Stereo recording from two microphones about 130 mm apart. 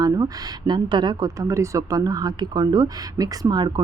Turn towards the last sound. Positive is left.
turn(degrees=-35)  # may be behind; listen again after turning